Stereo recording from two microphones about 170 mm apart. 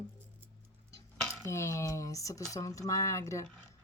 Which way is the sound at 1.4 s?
15° left (ahead or behind).